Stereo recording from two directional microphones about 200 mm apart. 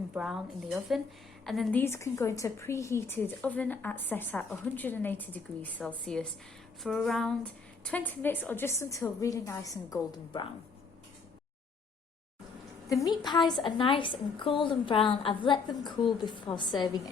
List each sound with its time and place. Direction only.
0.1 s a woman's voice: 5° right (ahead or behind)
1.8 s a woman's voice: 15° left (ahead or behind)
12.9 s a woman's voice: 20° left (ahead or behind)